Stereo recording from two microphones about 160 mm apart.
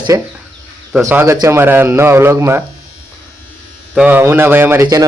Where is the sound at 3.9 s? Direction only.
10° right (ahead or behind).